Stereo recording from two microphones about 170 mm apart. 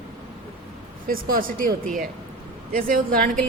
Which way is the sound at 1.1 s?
55° right (ahead or behind).